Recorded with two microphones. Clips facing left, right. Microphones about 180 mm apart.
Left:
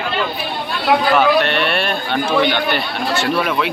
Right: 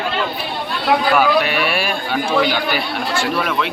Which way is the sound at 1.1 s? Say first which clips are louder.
Left 1 dB; 5° right (ahead or behind).